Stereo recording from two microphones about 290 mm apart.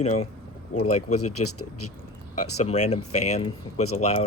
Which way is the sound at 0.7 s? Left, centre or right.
Left.